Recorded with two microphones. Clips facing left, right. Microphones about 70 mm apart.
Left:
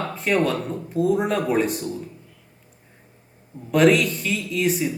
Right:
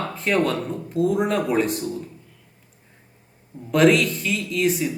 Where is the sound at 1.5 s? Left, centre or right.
Centre.